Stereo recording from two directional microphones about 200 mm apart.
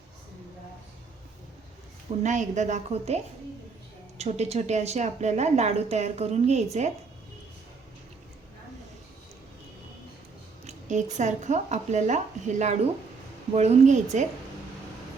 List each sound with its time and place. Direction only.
2.2 s a woman's voice: 35° right (ahead or behind)
4.2 s a woman's voice: 35° right (ahead or behind)
10.7 s a woman's voice: 35° right (ahead or behind)